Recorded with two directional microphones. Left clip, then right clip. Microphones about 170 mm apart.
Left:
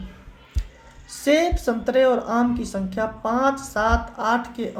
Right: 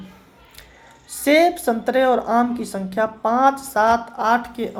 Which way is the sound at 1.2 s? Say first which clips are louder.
Right 4 dB; 25° right (ahead or behind).